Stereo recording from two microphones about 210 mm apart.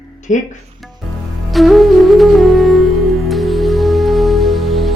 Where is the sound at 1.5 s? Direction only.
Centre (ahead or behind).